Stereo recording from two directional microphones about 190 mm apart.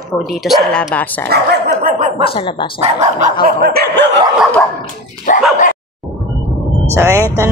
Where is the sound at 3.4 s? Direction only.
55° right (ahead or behind).